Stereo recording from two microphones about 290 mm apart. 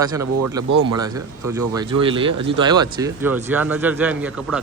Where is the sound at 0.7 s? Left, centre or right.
Right.